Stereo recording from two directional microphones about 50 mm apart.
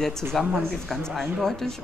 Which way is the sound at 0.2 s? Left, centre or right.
Right.